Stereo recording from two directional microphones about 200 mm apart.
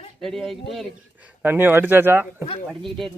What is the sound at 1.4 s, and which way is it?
Speech, 10° right (ahead or behind).